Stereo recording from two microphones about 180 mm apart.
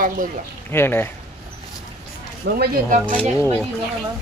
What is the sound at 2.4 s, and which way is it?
Speech, 55° right (ahead or behind).